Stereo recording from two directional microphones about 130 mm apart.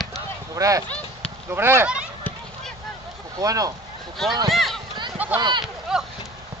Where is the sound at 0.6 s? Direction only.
25° right (ahead or behind).